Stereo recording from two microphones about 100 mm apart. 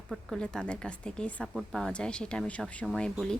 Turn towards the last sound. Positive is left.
turn(degrees=5)  # may be behind; listen again after turning